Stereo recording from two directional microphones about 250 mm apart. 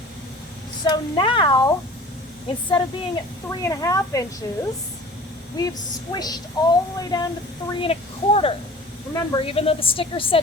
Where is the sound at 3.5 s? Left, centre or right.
Centre.